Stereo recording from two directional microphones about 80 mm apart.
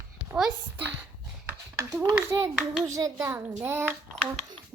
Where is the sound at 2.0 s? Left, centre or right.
Right.